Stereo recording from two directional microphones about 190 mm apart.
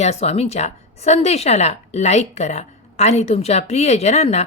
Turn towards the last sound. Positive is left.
turn(degrees=35)  # may be behind; listen again after turning